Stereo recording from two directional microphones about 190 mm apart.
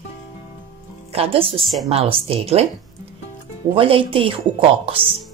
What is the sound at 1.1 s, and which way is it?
Speech, 30° right (ahead or behind).